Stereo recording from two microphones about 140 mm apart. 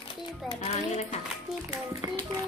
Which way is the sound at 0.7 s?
55° left (ahead or behind).